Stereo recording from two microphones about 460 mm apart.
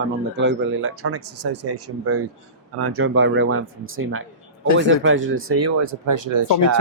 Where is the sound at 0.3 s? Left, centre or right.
Right.